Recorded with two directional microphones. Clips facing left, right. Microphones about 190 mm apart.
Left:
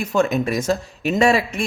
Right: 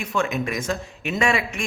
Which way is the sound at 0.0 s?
40° left (ahead or behind).